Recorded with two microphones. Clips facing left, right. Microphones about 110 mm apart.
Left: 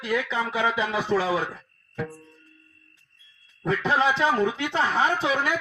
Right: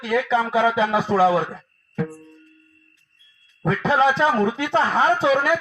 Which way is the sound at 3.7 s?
40° right (ahead or behind).